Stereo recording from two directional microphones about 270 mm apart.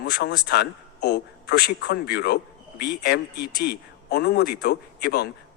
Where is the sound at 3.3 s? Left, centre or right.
Left.